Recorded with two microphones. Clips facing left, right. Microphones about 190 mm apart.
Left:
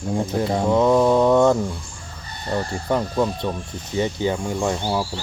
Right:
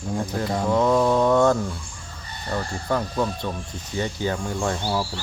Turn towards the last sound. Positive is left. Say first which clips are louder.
# left 2 dB
turn(degrees=15)  # may be behind; listen again after turning